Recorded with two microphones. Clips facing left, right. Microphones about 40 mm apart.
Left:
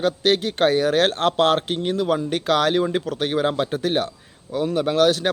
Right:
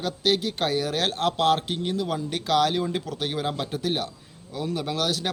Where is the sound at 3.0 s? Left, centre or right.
Left.